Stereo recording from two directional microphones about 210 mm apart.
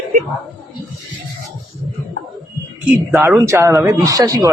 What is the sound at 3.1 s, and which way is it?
Speech, 10° right (ahead or behind).